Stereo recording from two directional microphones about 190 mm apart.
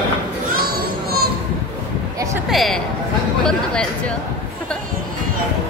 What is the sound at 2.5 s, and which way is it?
Speech, centre (ahead or behind).